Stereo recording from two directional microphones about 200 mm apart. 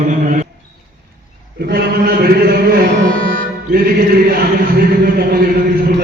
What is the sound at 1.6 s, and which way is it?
Mantra, 50° right (ahead or behind).